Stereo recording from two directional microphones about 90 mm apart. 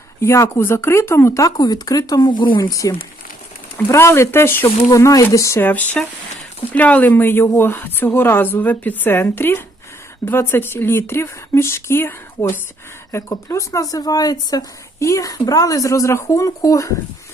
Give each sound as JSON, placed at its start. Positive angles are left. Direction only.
{"t": 0.2, "sound": "speech", "side_deg": 30}
{"t": 3.9, "sound": "a woman's voice", "side_deg": 30}
{"t": 4.8, "sound": "speech", "side_deg": 40}
{"t": 5.6, "sound": "a woman's voice", "side_deg": 20}
{"t": 13.1, "sound": "speech", "side_deg": 35}